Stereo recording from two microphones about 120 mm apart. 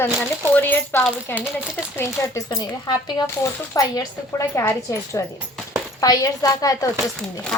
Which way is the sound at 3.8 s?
30° left (ahead or behind).